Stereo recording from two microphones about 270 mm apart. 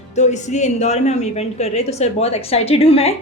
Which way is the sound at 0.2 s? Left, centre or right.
Left.